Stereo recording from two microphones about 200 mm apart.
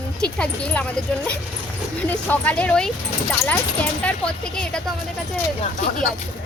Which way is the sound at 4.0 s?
5° left (ahead or behind).